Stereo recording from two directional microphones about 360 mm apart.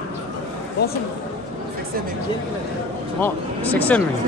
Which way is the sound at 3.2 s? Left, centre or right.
Centre.